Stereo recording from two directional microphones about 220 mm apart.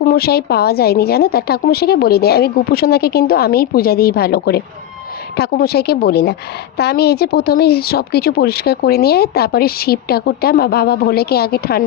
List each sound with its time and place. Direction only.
0.0 s speech: 45° left (ahead or behind)